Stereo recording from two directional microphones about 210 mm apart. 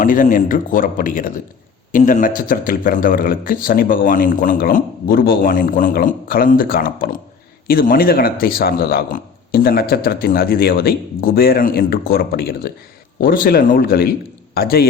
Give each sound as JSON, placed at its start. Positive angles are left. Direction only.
{"t": 0.0, "sound": "speech", "side_deg": 40}